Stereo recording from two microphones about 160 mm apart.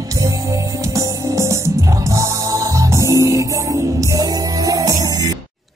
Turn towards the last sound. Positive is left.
turn(degrees=-20)  # may be behind; listen again after turning